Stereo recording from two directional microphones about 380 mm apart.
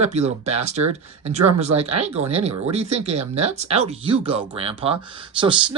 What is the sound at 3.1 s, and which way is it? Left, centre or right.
Speech, right.